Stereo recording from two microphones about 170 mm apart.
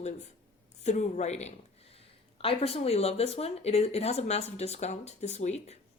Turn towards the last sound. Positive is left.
turn(degrees=40)  # may be behind; listen again after turning